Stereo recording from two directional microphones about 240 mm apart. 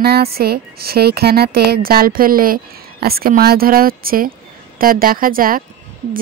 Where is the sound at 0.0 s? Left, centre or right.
Right.